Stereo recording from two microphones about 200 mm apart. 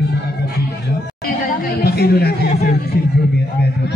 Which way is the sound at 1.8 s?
50° left (ahead or behind).